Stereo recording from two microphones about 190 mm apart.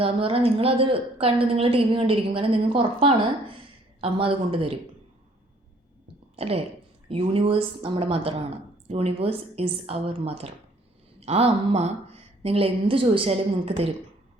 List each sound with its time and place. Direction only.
0.0 s a woman's voice: 30° right (ahead or behind)
6.3 s a woman's voice: 30° right (ahead or behind)